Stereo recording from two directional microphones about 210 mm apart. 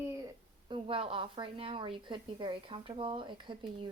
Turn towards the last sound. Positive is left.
turn(degrees=-20)  # may be behind; listen again after turning